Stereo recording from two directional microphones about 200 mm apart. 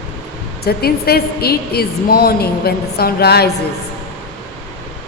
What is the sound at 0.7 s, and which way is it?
A woman's voice, 50° left (ahead or behind).